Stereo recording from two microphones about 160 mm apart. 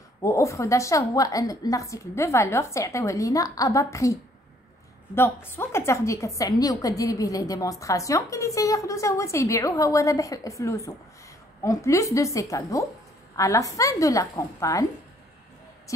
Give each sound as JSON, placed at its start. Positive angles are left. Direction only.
{"t": 0.2, "sound": "a woman's voice", "side_deg": 20}